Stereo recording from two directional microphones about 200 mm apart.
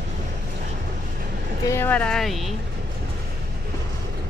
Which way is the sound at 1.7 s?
10° left (ahead or behind).